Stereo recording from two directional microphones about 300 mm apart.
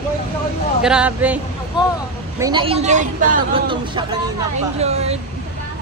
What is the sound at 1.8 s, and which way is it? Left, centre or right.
Speech, centre.